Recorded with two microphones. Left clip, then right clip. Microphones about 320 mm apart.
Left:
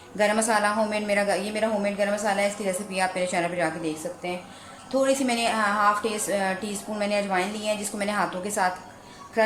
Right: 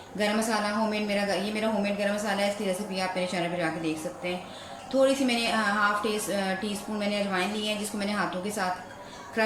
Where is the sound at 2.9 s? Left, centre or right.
Left.